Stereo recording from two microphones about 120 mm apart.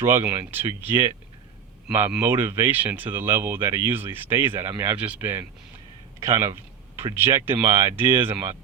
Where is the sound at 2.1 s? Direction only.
15° right (ahead or behind).